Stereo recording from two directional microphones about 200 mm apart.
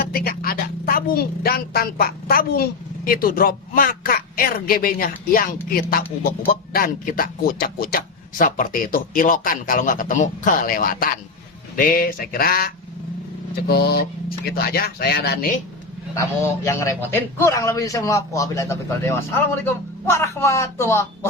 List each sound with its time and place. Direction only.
0.0 s a woman's voice: 50° left (ahead or behind)
16.6 s a man's voice: 15° left (ahead or behind)